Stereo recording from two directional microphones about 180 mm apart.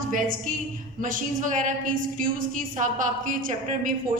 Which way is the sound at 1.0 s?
45° right (ahead or behind).